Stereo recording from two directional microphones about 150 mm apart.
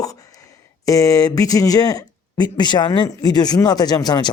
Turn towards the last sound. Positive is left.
turn(degrees=25)  # may be behind; listen again after turning